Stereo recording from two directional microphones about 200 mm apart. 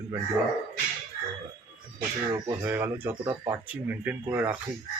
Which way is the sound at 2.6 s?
10° right (ahead or behind).